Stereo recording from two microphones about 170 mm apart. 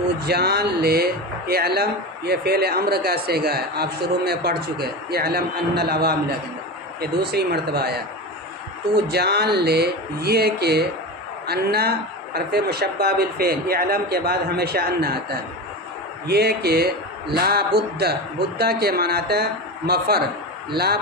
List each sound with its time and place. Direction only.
0.2 s speech: 70° right (ahead or behind)
9.0 s speech: 70° right (ahead or behind)